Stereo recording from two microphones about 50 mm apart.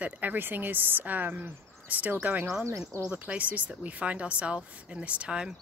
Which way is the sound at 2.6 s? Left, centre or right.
Right.